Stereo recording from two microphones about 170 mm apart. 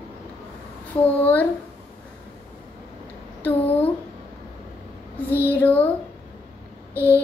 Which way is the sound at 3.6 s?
35° left (ahead or behind).